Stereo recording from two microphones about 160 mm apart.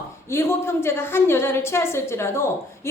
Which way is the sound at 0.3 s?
15° left (ahead or behind).